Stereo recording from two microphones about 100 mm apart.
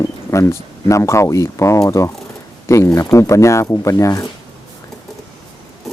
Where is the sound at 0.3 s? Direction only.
30° left (ahead or behind).